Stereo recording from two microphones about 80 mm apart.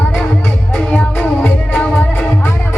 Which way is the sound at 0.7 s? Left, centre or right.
Centre.